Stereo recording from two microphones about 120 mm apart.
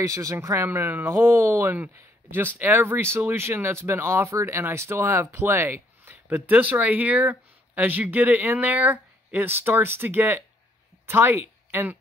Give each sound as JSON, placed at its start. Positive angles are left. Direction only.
{"t": 0.0, "sound": "speech", "side_deg": -25}